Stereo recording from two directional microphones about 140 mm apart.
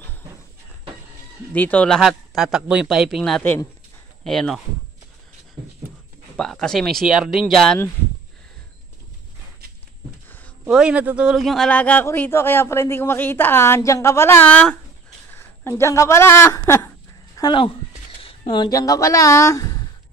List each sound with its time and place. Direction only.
1.5 s a man's voice: 10° left (ahead or behind)
2.0 s speech: centre (ahead or behind)
6.3 s speech: 5° left (ahead or behind)
10.7 s a man's voice: 5° right (ahead or behind); by 16.9 s 20° left (ahead or behind)
17.4 s speech: 30° left (ahead or behind)
18.2 s a sound: 40° left (ahead or behind)
18.7 s a woman's voice: 25° left (ahead or behind)